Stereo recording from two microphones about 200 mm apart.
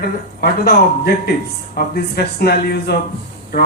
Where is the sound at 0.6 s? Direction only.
50° left (ahead or behind).